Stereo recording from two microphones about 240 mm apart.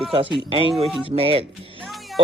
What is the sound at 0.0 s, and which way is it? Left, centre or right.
Speech, right.